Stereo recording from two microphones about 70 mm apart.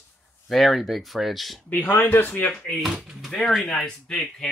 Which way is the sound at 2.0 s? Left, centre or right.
Left.